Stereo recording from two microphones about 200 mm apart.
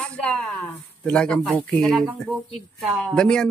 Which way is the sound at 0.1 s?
5° left (ahead or behind).